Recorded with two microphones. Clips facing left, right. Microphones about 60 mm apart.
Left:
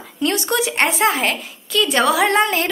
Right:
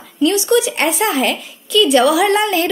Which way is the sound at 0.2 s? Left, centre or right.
Left.